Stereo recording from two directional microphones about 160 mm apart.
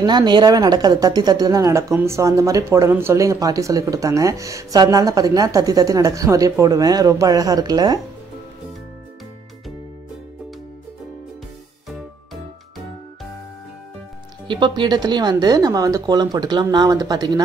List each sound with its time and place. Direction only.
0.0 s speech: 25° right (ahead or behind)
14.5 s speech: 30° right (ahead or behind)